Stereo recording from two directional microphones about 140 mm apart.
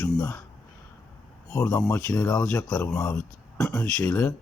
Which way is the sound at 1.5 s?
15° left (ahead or behind).